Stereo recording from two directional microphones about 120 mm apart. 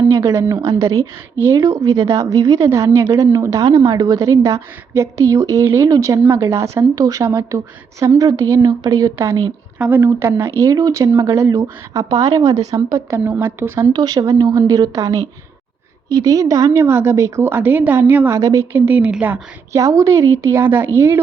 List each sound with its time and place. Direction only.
0.1 s a woman's voice: 25° right (ahead or behind)
9.7 s speech: 10° right (ahead or behind)
10.0 s a woman's voice: 20° right (ahead or behind)
13.9 s a woman's voice: 35° right (ahead or behind); by 18.3 s 15° right (ahead or behind)
18.3 s speech: 25° right (ahead or behind)
19.7 s a woman's voice: 25° right (ahead or behind)